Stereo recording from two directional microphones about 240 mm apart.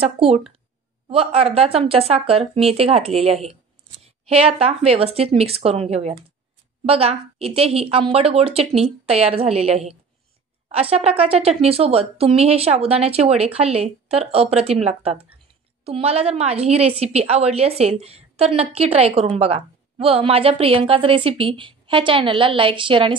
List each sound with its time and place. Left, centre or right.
0.0 s speech: right